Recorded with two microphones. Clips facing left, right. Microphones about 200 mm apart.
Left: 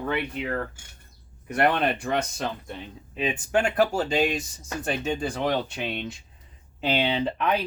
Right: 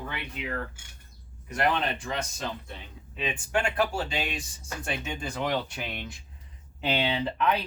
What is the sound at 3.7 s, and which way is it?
Speech, 40° left (ahead or behind).